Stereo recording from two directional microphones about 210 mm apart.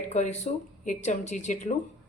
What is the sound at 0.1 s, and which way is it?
Speech, 35° left (ahead or behind).